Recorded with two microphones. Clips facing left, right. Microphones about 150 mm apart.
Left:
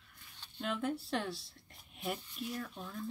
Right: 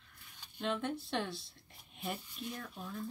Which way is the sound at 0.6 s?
5° left (ahead or behind).